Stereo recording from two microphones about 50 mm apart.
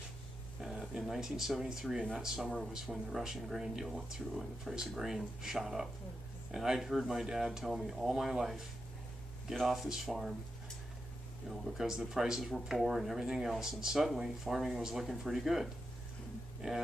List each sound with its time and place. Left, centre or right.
0.6 s speech: centre
11.4 s speech: centre